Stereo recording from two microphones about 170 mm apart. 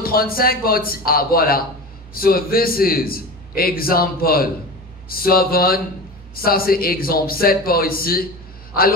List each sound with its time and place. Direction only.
0.0 s a man's voice: 60° left (ahead or behind)